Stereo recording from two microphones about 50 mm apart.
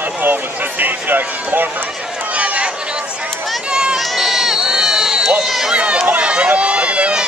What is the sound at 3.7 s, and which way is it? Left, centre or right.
Crowd, centre.